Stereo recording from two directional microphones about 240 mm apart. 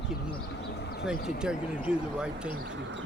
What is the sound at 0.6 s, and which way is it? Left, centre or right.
Speech, left.